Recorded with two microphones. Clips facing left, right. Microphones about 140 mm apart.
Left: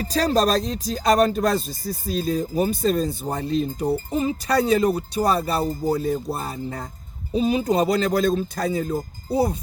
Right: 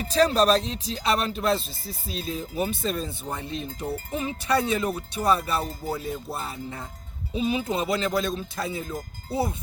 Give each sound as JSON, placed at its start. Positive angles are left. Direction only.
{"t": 0.0, "sound": "speech", "side_deg": 40}